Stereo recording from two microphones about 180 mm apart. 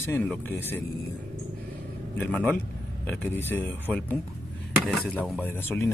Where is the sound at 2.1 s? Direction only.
10° left (ahead or behind).